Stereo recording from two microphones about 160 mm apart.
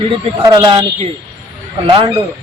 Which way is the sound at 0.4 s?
25° right (ahead or behind).